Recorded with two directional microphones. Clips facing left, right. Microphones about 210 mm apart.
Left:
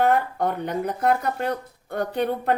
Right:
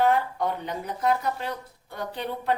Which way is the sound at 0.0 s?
55° left (ahead or behind).